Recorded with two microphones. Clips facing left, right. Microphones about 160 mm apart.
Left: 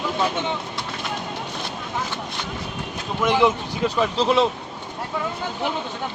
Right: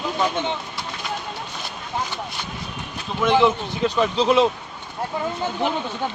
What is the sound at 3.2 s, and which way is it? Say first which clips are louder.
Speech: right 1 dB; 5° left (ahead or behind).